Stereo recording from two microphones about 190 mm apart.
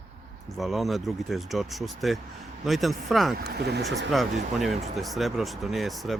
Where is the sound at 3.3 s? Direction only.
55° right (ahead or behind).